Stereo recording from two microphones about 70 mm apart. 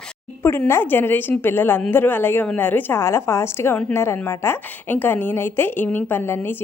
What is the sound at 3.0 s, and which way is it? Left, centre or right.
A woman's voice, left.